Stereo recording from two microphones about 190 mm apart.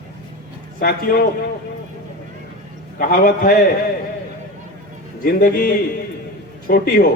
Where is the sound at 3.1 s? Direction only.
50° left (ahead or behind).